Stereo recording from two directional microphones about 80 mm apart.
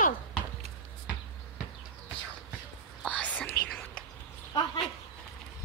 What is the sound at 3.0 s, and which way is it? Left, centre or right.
Whispering, centre.